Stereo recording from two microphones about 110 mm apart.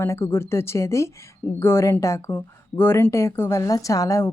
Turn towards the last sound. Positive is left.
turn(degrees=30)  # may be behind; listen again after turning